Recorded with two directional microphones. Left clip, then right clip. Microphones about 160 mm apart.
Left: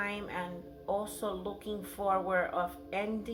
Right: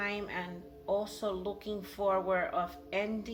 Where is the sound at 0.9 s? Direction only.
20° right (ahead or behind).